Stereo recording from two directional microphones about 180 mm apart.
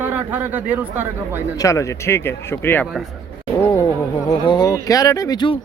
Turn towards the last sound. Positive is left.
turn(degrees=25)  # may be behind; listen again after turning